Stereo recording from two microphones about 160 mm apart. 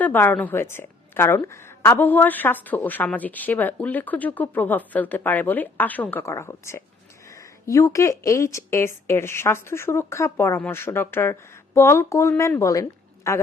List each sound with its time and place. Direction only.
0.0 s a woman's voice: 10° left (ahead or behind)